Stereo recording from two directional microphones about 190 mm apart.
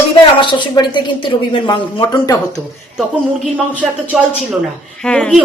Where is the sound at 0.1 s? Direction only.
25° left (ahead or behind).